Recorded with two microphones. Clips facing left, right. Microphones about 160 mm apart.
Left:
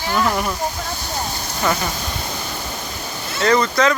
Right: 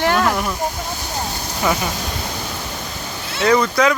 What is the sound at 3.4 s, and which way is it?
Speech, 5° right (ahead or behind).